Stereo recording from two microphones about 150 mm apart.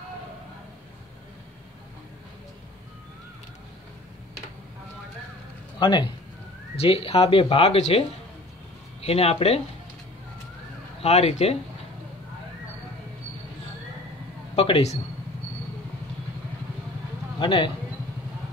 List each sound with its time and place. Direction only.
5.8 s speech: 30° left (ahead or behind)
6.8 s speech: 40° left (ahead or behind)
9.0 s speech: 40° left (ahead or behind)
11.0 s speech: 45° left (ahead or behind)
14.5 s a man's voice: 40° left (ahead or behind)
17.4 s speech: 35° left (ahead or behind)